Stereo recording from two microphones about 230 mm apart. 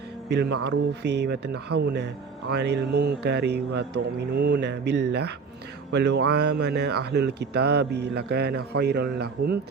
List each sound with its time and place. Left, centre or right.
0.3 s speech: right